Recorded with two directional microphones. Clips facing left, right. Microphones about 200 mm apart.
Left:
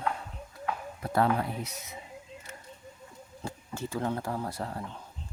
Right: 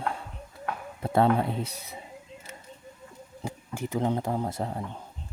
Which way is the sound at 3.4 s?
15° right (ahead or behind).